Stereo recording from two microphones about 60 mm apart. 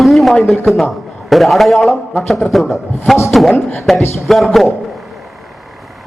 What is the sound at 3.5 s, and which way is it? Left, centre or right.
Speech, left.